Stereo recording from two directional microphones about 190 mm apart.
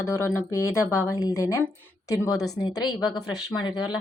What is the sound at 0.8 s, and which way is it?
Speech, 10° right (ahead or behind).